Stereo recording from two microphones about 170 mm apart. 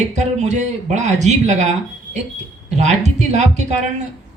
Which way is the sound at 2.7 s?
45° right (ahead or behind).